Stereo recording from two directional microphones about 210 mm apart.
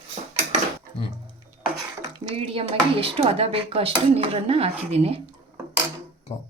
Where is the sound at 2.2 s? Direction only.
25° right (ahead or behind).